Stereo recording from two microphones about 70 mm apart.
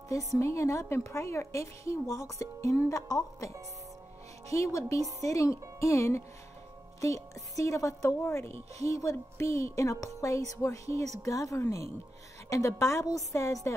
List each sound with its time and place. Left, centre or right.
0.4 s a woman's voice: left
8.2 s a woman's voice: left